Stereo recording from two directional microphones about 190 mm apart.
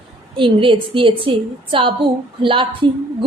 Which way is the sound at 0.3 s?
25° right (ahead or behind).